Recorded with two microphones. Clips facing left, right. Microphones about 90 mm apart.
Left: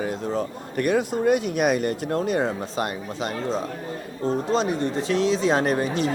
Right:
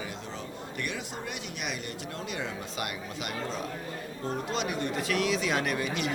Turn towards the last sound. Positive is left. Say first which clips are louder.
# left 8 dB
turn(degrees=35)  # may be behind; listen again after turning